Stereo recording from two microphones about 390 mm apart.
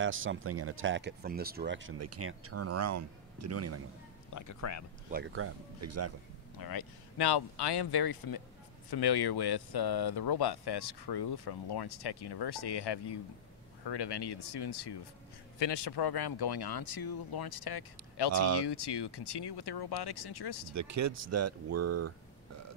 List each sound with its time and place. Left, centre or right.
0.0 s speech: right
4.3 s speech: left
5.1 s speech: right
6.6 s speech: left
15.6 s speech: left
18.3 s speech: right
18.6 s speech: left
20.7 s speech: right